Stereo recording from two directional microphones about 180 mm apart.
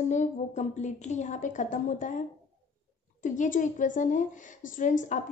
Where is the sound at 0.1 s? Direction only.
40° left (ahead or behind).